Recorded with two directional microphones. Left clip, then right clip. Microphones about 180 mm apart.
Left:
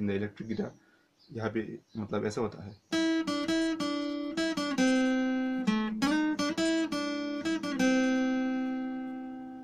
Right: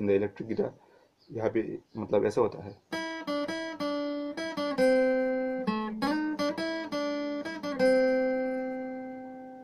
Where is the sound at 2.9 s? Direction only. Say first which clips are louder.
Left 4 dB; 50° left (ahead or behind).